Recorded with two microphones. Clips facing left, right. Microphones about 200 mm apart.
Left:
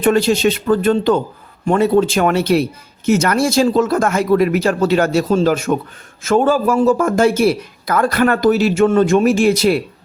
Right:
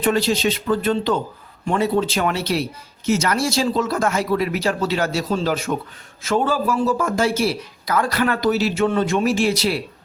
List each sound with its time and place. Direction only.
0.0 s speech: 50° left (ahead or behind)